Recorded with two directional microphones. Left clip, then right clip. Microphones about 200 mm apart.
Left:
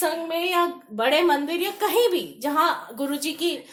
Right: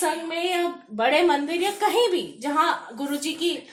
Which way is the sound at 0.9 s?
40° left (ahead or behind).